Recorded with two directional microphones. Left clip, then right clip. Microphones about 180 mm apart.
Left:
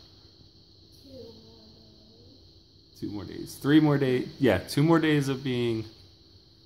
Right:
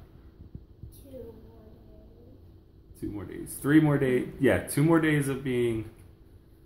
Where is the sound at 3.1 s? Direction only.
45° left (ahead or behind).